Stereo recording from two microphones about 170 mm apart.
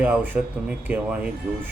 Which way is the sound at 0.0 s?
10° right (ahead or behind).